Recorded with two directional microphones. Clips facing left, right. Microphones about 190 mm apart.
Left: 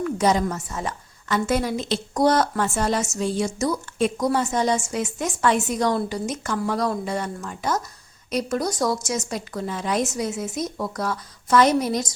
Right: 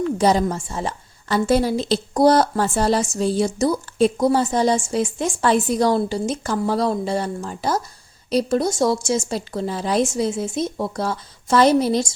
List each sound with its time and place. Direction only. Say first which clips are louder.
0.0 s a woman's voice: right 3 dB; 30° right (ahead or behind)